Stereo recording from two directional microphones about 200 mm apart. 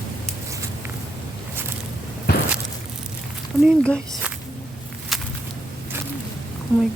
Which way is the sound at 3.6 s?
5° left (ahead or behind).